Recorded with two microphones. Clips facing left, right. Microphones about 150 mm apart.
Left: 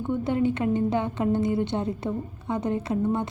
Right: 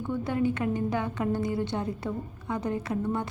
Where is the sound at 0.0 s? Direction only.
20° left (ahead or behind).